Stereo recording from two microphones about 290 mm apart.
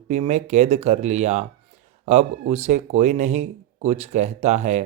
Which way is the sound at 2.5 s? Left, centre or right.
Right.